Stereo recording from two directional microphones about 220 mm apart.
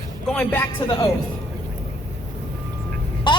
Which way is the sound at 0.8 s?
15° left (ahead or behind).